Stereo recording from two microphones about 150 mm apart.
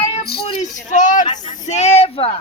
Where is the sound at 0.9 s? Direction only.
60° left (ahead or behind).